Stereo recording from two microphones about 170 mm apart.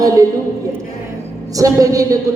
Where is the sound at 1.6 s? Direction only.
20° right (ahead or behind).